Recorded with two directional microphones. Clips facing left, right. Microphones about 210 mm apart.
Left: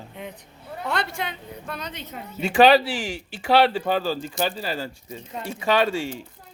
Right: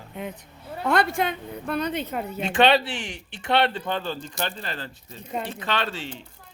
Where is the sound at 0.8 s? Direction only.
50° right (ahead or behind).